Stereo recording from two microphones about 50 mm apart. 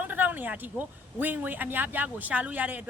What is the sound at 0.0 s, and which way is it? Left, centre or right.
Speech, right.